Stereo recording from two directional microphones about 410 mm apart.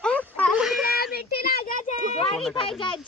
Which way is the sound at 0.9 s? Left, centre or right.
Left.